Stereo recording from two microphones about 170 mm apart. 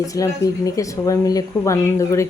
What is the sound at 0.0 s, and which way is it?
Speech, 20° left (ahead or behind).